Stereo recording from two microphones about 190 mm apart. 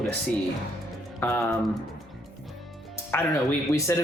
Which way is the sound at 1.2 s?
10° left (ahead or behind).